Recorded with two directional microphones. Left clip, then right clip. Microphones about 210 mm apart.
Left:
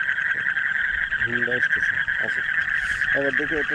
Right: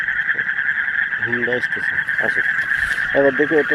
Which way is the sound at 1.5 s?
10° left (ahead or behind).